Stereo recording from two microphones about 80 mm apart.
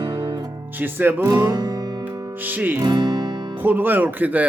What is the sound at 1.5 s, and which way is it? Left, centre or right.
Music, right.